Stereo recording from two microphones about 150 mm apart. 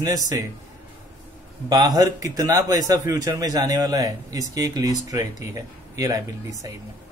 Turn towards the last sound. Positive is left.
turn(degrees=-20)  # may be behind; listen again after turning